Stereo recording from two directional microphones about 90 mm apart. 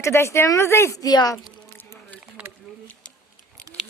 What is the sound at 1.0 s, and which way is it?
Speech, 45° left (ahead or behind).